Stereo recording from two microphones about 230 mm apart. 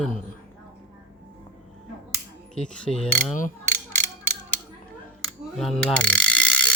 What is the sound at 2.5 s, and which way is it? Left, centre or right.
Speech, centre.